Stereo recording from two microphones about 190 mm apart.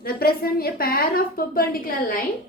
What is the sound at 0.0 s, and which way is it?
A woman's voice, 50° left (ahead or behind).